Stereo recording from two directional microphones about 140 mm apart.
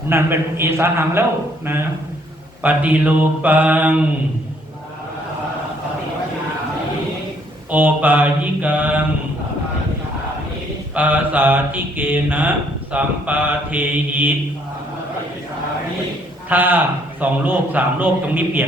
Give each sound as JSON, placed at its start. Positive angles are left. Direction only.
{"t": 0.1, "sound": "speech", "side_deg": -15}
{"t": 2.6, "sound": "speech", "side_deg": -10}
{"t": 7.7, "sound": "speech", "side_deg": -15}
{"t": 10.9, "sound": "speech", "side_deg": -10}
{"t": 16.5, "sound": "speech", "side_deg": -15}